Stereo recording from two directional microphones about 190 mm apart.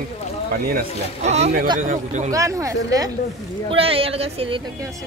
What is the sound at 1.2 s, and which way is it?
Speech, 35° right (ahead or behind).